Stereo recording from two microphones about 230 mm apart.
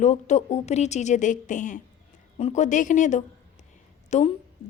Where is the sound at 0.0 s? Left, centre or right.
Left.